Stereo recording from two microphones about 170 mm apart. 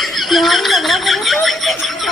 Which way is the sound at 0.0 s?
Centre (ahead or behind).